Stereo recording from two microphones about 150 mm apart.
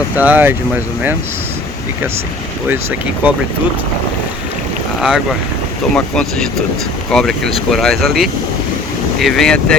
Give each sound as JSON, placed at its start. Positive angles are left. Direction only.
{"t": 0.2, "sound": "speech", "side_deg": -10}
{"t": 4.9, "sound": "speech", "side_deg": 0}